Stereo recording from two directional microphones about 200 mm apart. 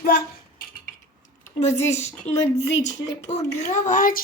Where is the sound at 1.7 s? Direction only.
15° left (ahead or behind).